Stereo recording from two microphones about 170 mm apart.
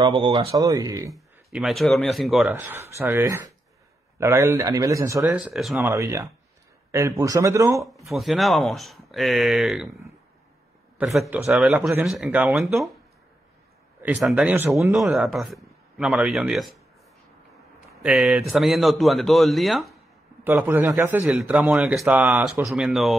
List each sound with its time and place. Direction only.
0.0 s speech: 30° right (ahead or behind)
1.1 s speech: centre (ahead or behind)
2.4 s a man's voice: 10° right (ahead or behind)
5.2 s a man's voice: 5° right (ahead or behind)
5.8 s a man's voice: 15° right (ahead or behind)
8.1 s a man's voice: centre (ahead or behind)
11.0 s a man's voice: centre (ahead or behind)
14.0 s a man's voice: 5° right (ahead or behind)
15.0 s a man's voice: centre (ahead or behind)
20.4 s a man's voice: 10° right (ahead or behind)